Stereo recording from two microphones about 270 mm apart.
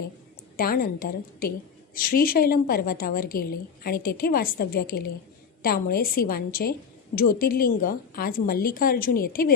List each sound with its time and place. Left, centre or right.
0.5 s a woman's voice: left